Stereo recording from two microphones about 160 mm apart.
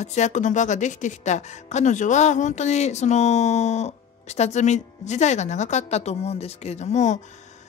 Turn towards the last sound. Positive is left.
turn(degrees=50)  # may be behind; listen again after turning